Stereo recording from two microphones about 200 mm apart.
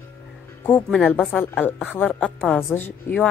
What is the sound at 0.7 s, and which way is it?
A woman's voice, 5° left (ahead or behind).